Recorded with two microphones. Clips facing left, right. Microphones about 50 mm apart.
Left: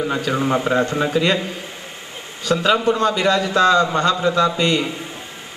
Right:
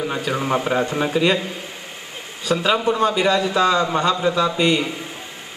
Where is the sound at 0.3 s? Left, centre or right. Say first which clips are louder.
Left 1 dB; centre.